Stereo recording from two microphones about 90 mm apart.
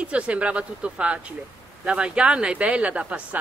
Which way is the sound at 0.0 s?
15° right (ahead or behind).